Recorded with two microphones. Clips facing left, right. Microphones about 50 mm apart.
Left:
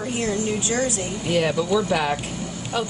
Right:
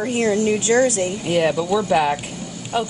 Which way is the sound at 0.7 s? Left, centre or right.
Right.